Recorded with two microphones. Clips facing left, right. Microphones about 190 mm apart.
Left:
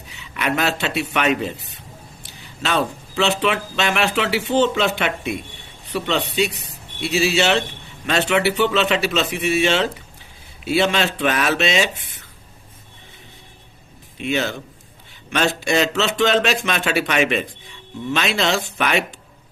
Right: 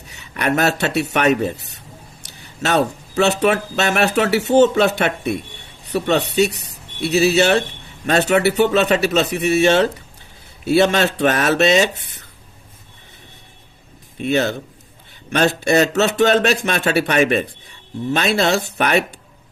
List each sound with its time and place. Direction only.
0.2 s a man's voice: 45° right (ahead or behind)
14.2 s a man's voice: 40° right (ahead or behind)